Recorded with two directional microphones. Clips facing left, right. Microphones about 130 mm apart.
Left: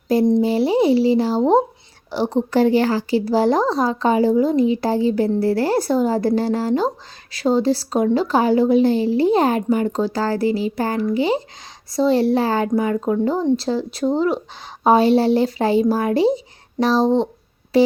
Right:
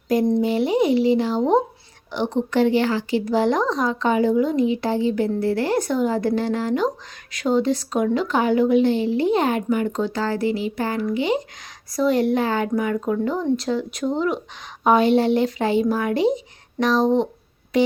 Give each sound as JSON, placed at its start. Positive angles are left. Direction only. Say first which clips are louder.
{"t": 0.1, "sound": "a woman's voice", "louder": "left 3 dB", "side_deg": 30}
{"t": 17.7, "sound": "busy signal", "louder": "left 4 dB", "side_deg": 35}